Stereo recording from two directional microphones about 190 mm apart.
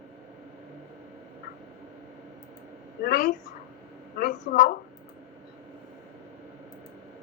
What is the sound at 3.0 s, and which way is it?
A woman's voice, 45° left (ahead or behind).